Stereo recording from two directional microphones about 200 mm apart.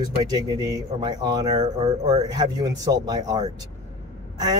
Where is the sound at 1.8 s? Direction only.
35° right (ahead or behind).